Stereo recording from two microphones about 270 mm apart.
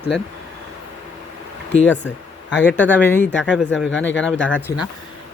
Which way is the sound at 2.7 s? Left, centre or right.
Centre.